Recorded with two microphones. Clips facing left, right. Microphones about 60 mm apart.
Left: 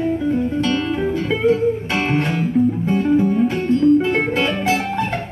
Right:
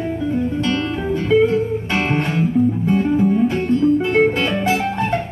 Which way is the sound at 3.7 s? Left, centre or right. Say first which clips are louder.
Left 1 dB; centre.